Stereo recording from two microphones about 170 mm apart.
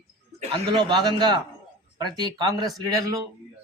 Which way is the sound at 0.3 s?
30° right (ahead or behind).